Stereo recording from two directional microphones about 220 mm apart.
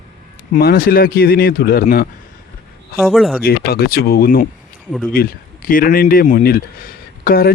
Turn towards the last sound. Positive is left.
turn(degrees=40)  # may be behind; listen again after turning